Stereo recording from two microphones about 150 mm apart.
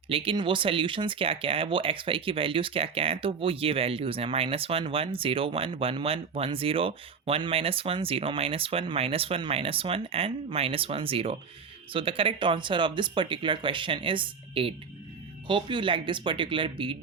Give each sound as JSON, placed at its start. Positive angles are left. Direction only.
{"t": 0.1, "sound": "speech", "side_deg": -35}